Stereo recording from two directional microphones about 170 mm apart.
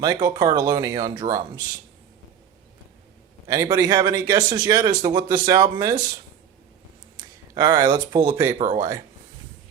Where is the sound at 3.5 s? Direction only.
20° right (ahead or behind).